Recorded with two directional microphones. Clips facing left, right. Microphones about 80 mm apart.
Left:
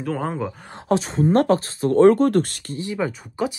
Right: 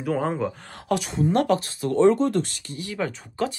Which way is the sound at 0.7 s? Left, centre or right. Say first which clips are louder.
Left 4 dB; left.